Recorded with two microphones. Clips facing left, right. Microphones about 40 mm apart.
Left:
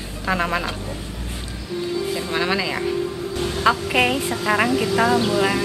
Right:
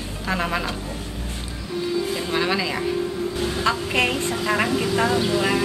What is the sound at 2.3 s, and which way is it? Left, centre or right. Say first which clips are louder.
A woman's voice: left 1 dB; centre.